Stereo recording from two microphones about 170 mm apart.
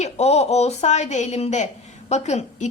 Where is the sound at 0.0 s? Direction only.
40° left (ahead or behind).